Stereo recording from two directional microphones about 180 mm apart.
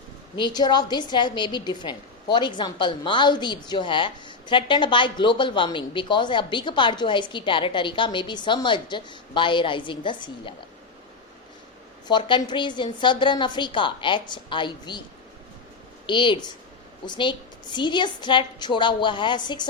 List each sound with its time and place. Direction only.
0.3 s a woman's voice: 25° left (ahead or behind)
12.0 s a woman's voice: 25° left (ahead or behind)
16.0 s a woman's voice: 25° left (ahead or behind)